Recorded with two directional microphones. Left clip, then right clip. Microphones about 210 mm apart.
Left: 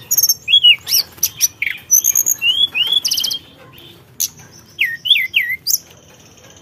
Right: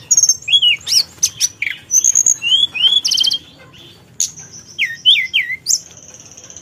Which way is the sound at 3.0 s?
10° left (ahead or behind).